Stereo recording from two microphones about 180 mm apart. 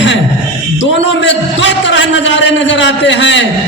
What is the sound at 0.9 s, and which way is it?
A man's voice, 85° left.